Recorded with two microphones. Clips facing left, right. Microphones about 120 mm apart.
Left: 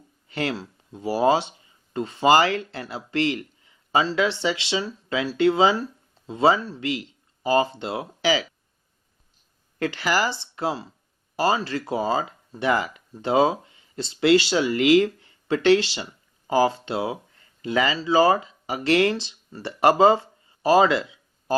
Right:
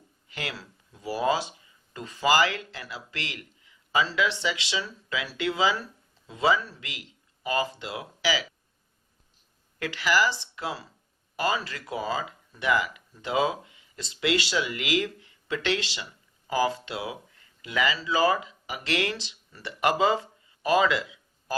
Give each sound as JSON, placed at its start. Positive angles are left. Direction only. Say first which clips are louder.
{"t": 0.3, "sound": "speech", "louder": "left 9 dB", "side_deg": 35}
{"t": 9.7, "sound": "speech", "louder": "left 2 dB", "side_deg": 30}